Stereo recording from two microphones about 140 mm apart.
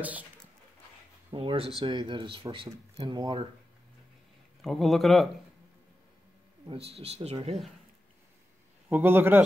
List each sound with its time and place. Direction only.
0.0 s speech: 10° right (ahead or behind)
1.3 s speech: 40° right (ahead or behind)
4.6 s a man's voice: centre (ahead or behind)
6.7 s speech: 45° right (ahead or behind)
8.8 s a man's voice: 15° right (ahead or behind)